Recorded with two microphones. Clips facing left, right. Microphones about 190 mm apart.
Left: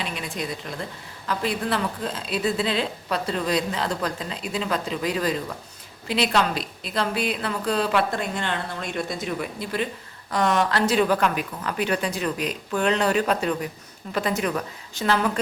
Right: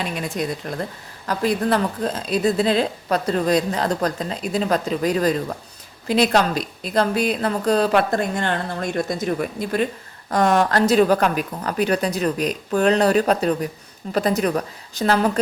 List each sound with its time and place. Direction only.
0.0 s speech: 45° right (ahead or behind)